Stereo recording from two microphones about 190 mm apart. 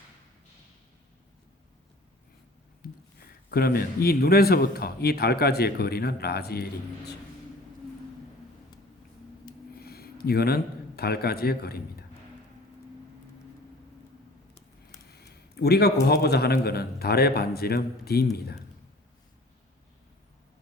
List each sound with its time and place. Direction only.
2.8 s a sound: 50° left (ahead or behind)
3.5 s a man's voice: 55° left (ahead or behind)
9.8 s a man's voice: 55° left (ahead or behind)
15.1 s a man's voice: 60° left (ahead or behind)